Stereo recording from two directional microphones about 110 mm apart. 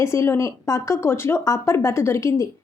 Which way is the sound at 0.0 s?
25° left (ahead or behind).